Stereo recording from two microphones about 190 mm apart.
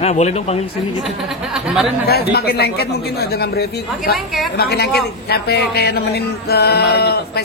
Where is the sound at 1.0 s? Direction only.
Centre (ahead or behind).